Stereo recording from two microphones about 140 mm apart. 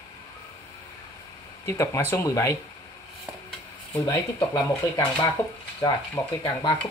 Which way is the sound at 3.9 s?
20° left (ahead or behind).